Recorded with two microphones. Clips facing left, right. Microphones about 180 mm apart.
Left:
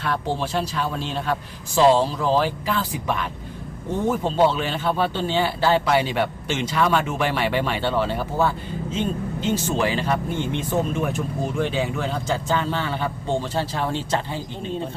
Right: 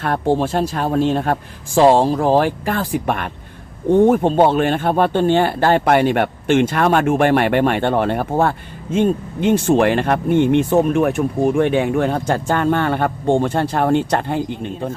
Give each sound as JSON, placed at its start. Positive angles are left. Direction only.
{"t": 0.0, "sound": "speech", "side_deg": -50}